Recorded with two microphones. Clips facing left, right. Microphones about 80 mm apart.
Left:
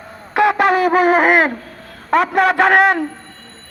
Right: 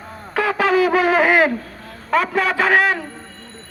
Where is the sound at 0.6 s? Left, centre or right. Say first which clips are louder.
Right 1 dB; left.